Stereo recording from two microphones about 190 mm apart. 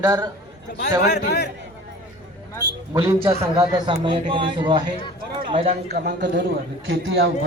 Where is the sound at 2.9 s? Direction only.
15° right (ahead or behind).